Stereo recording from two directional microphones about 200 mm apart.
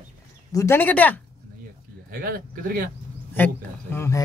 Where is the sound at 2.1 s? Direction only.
45° right (ahead or behind).